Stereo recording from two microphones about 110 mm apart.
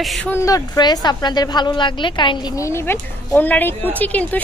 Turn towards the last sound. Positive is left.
turn(degrees=15)  # may be behind; listen again after turning